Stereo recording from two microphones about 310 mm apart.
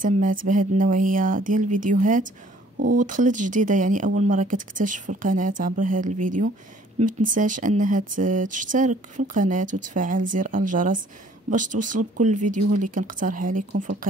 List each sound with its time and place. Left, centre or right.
0.0 s speech: right